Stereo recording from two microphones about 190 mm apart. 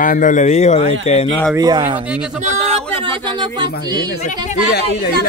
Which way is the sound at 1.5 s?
20° right (ahead or behind).